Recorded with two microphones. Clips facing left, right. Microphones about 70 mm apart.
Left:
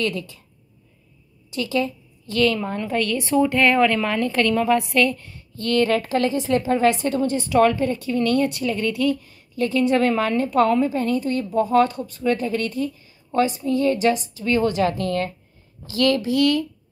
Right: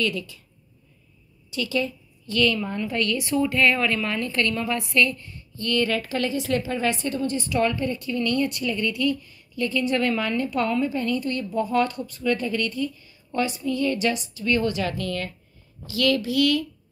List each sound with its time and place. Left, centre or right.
0.0 s a woman's voice: left
1.5 s a woman's voice: left
3.4 s a woman's voice: left
5.6 s a woman's voice: left
6.9 s a woman's voice: left
8.1 s a woman's voice: left